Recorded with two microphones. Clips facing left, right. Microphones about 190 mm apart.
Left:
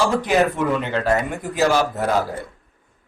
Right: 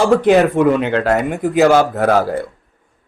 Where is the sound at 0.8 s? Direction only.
65° right (ahead or behind).